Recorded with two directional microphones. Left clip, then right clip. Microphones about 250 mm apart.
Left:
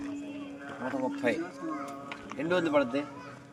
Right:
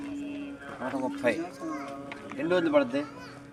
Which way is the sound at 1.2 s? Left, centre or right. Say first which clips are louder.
Right 5 dB; centre.